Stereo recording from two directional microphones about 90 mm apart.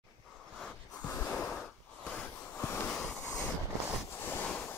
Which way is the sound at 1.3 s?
10° left (ahead or behind).